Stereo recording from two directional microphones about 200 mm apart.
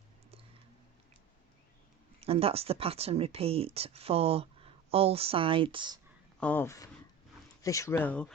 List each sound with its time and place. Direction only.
2.2 s speech: 30° right (ahead or behind)
6.4 s speech: 10° left (ahead or behind)